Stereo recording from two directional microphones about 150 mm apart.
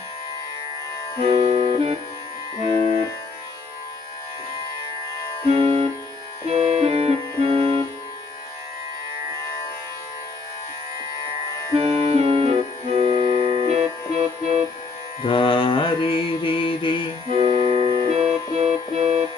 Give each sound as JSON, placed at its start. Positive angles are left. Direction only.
{"t": 1.3, "sound": "music", "side_deg": -40}
{"t": 5.5, "sound": "music", "side_deg": -40}
{"t": 11.7, "sound": "music", "side_deg": -40}
{"t": 15.2, "sound": "mantra", "side_deg": 35}
{"t": 17.3, "sound": "music", "side_deg": -35}